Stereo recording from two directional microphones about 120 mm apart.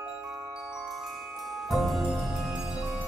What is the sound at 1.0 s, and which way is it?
Mallet percussion, centre (ahead or behind).